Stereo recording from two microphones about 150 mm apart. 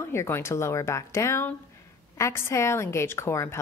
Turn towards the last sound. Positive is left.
turn(degrees=20)  # may be behind; listen again after turning